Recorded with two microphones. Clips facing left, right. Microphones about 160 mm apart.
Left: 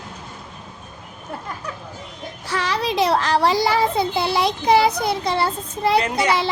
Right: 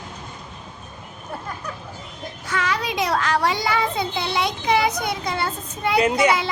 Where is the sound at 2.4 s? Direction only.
35° left (ahead or behind).